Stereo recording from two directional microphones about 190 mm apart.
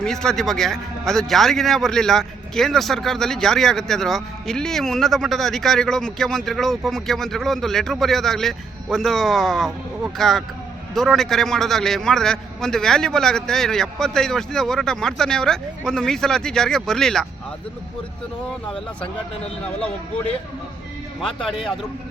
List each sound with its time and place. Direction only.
0.0 s speech: 5° left (ahead or behind)
21.2 s speech: 5° left (ahead or behind)